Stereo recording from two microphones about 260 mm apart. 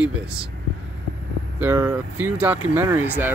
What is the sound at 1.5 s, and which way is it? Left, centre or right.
Speech, centre.